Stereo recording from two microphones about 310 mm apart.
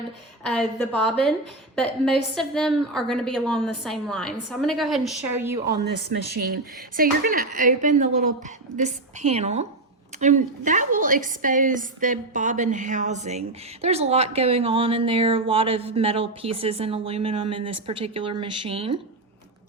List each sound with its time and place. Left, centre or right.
0.4 s a woman's voice: centre
6.9 s a woman's voice: right